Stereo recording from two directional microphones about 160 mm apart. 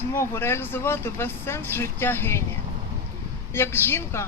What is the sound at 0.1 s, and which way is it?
Speech, 15° left (ahead or behind).